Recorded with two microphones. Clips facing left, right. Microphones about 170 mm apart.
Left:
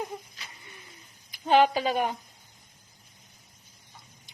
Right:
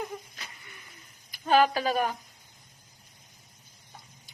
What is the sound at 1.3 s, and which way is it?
Speech, 20° left (ahead or behind).